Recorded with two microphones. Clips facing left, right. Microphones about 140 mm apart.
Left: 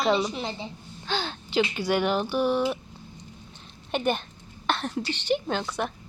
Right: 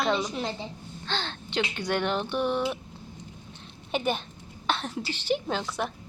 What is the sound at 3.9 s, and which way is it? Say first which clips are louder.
A woman's voice: left 2 dB; centre (ahead or behind).